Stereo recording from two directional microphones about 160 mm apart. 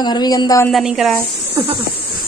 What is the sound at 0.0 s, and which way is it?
Speech, 25° left (ahead or behind).